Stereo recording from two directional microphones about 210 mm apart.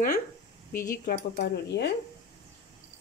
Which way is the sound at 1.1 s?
50° left (ahead or behind).